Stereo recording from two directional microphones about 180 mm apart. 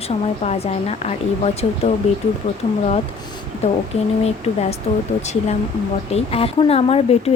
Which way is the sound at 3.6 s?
35° left (ahead or behind).